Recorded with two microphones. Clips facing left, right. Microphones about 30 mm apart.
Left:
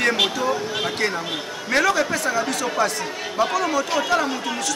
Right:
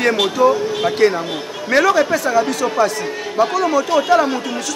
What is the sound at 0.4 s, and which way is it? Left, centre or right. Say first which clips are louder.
A man's voice: right 8 dB; centre.